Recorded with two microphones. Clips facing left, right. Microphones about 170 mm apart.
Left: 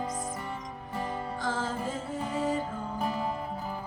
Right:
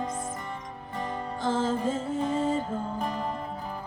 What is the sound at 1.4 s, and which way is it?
Music, 25° right (ahead or behind).